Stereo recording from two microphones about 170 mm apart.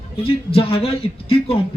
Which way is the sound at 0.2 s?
30° left (ahead or behind).